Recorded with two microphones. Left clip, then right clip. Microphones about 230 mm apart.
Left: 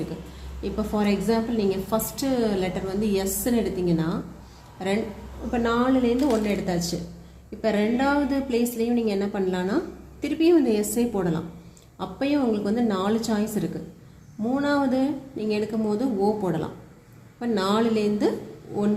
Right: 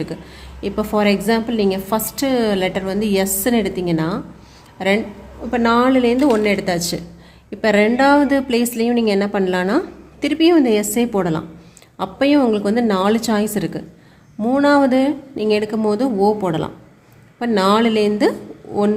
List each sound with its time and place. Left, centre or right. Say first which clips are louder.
0.6 s a woman's voice: right 9 dB; right